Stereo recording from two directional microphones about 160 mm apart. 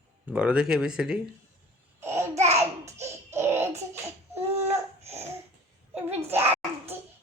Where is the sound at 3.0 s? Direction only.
15° right (ahead or behind).